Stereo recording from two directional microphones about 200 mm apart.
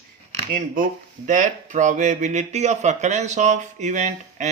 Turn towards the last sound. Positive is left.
turn(degrees=-35)  # may be behind; listen again after turning